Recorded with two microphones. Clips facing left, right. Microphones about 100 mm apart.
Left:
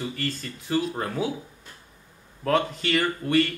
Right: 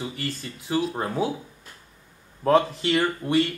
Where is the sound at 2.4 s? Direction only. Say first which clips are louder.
Right 4 dB; 20° right (ahead or behind).